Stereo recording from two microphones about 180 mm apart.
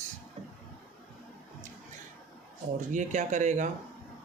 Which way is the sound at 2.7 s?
45° right (ahead or behind).